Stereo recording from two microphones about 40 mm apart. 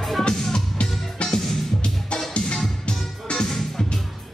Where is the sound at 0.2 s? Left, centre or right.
Centre.